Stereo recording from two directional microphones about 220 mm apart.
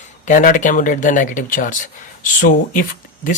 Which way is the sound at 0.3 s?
35° left (ahead or behind).